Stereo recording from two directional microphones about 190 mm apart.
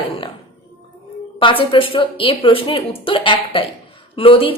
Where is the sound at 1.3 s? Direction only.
25° left (ahead or behind).